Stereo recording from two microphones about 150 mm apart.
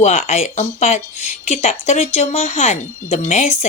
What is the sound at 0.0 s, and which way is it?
Speech, 50° left (ahead or behind).